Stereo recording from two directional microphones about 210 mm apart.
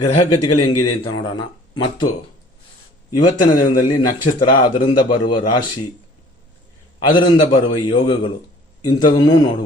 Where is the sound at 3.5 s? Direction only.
40° left (ahead or behind).